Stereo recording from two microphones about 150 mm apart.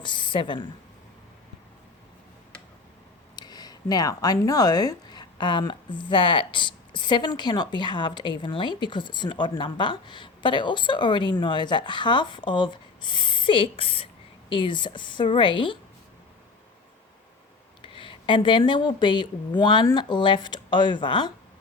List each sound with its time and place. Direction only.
0.0 s a woman's voice: 35° left (ahead or behind)
3.3 s speech: 25° left (ahead or behind)
17.8 s speech: 35° left (ahead or behind)